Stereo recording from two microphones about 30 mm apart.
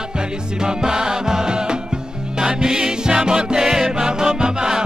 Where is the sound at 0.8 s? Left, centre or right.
Right.